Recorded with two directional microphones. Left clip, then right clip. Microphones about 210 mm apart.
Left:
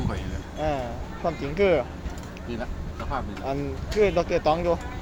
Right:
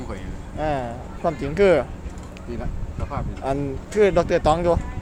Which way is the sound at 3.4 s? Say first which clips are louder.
Right 4 dB; 35° right (ahead or behind).